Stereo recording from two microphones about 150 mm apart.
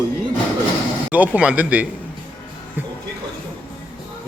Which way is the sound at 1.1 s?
10° right (ahead or behind).